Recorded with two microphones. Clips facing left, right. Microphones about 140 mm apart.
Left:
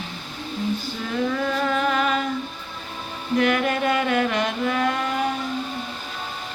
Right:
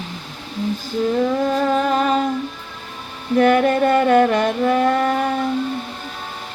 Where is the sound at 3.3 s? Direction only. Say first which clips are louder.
Right 7 dB; 45° right (ahead or behind).